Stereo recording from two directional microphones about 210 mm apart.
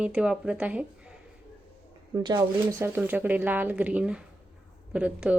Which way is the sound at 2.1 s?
20° right (ahead or behind).